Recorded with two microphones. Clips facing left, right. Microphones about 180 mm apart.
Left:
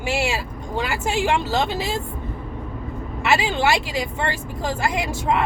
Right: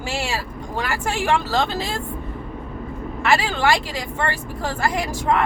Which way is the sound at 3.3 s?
15° left (ahead or behind).